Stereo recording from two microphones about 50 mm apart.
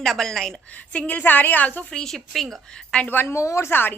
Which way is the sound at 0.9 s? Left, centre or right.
Left.